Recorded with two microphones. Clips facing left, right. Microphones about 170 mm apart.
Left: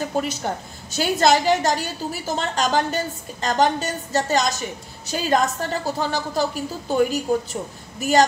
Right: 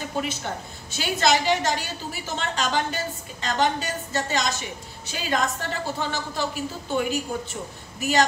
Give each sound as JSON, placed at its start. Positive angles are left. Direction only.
{"t": 0.2, "sound": "a woman's voice", "side_deg": 40}